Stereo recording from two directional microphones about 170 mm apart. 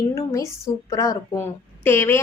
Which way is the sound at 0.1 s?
15° left (ahead or behind).